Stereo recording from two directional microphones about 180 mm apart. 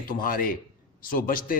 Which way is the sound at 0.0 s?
50° left (ahead or behind).